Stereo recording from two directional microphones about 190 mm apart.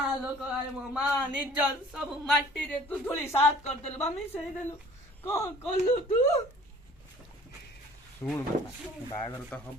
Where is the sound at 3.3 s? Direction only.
35° left (ahead or behind).